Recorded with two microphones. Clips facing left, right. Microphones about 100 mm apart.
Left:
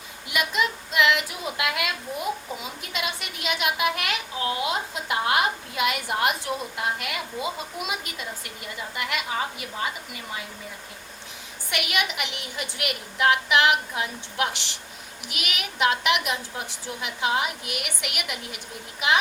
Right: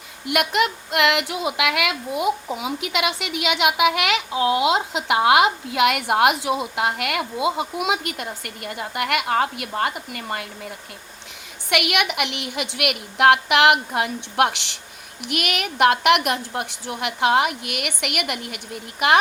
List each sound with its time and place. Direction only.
0.3 s a woman's voice: 60° right (ahead or behind)
11.7 s a woman's voice: 65° right (ahead or behind)